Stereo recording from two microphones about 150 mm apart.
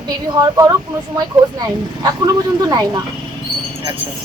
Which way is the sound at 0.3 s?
25° right (ahead or behind).